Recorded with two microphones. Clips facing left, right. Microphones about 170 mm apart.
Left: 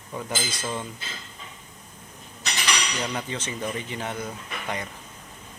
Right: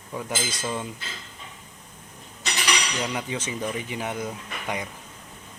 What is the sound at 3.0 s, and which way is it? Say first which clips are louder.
Speech: right 1 dB; 10° right (ahead or behind).